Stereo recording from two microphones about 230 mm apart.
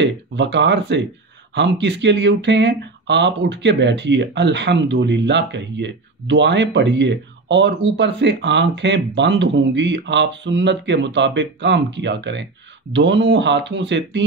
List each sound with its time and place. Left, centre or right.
0.0 s speech: right